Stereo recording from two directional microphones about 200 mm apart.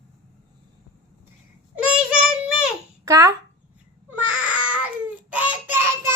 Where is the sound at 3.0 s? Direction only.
15° right (ahead or behind).